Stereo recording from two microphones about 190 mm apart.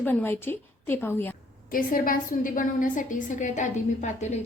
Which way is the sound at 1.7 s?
50° left (ahead or behind).